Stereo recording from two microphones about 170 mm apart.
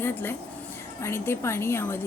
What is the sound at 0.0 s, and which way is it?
A woman's voice, 10° left (ahead or behind).